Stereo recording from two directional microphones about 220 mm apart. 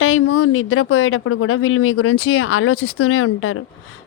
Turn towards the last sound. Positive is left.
turn(degrees=70)  # may be behind; listen again after turning